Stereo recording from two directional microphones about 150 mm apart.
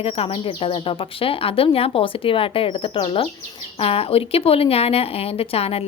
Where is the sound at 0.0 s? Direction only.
40° left (ahead or behind).